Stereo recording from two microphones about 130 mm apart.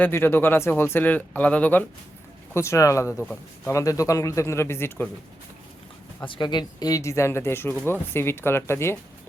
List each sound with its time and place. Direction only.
0.0 s speech: 15° left (ahead or behind)
2.6 s speech: 20° left (ahead or behind)
6.2 s speech: 40° left (ahead or behind); by 9.0 s 20° left (ahead or behind)